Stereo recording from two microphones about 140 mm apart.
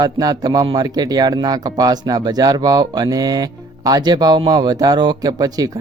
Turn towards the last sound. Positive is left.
turn(degrees=-25)  # may be behind; listen again after turning